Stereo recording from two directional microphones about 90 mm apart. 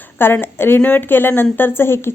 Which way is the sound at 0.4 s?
25° left (ahead or behind).